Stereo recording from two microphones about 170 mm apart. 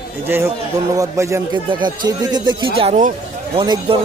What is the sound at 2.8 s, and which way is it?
Speech, 45° right (ahead or behind).